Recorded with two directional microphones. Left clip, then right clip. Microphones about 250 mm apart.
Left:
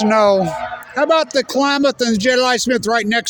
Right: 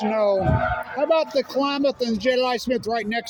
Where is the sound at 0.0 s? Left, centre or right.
Left.